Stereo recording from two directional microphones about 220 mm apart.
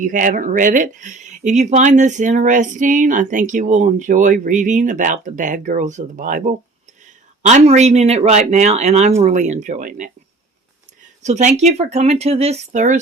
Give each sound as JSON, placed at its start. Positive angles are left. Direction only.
{"t": 0.0, "sound": "speech", "side_deg": -35}
{"t": 11.2, "sound": "speech", "side_deg": -35}